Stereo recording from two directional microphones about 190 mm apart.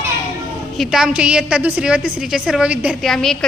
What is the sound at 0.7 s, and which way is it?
A woman's voice, centre (ahead or behind).